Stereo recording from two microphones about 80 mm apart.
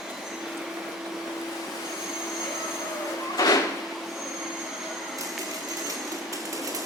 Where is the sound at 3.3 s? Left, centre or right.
Left.